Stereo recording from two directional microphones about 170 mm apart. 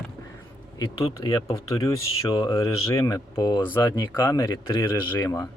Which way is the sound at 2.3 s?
30° left (ahead or behind).